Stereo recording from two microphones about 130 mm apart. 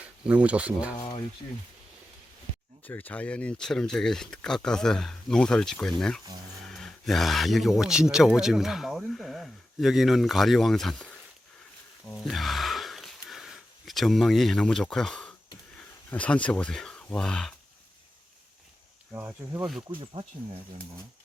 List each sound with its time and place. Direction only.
0.0 s speech: 10° right (ahead or behind)
2.8 s speech: 15° left (ahead or behind)
12.1 s sniff: centre (ahead or behind)
16.0 s speech: 10° left (ahead or behind)
19.1 s speech: 15° right (ahead or behind)